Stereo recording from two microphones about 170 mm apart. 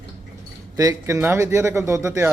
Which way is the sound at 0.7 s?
20° right (ahead or behind).